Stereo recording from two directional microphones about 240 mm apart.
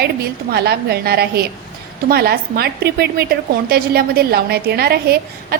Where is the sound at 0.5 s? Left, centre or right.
Right.